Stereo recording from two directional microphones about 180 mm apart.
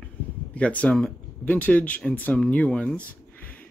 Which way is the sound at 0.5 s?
5° left (ahead or behind).